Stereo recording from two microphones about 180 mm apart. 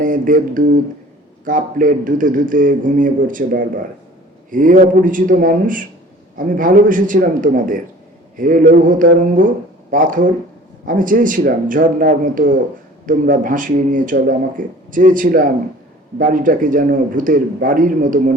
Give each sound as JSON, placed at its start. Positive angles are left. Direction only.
{"t": 0.0, "sound": "speech", "side_deg": -50}